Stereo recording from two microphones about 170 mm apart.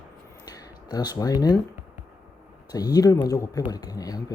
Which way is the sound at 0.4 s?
25° left (ahead or behind).